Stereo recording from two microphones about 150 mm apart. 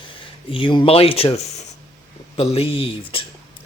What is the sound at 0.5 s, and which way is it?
Speech, 35° left (ahead or behind).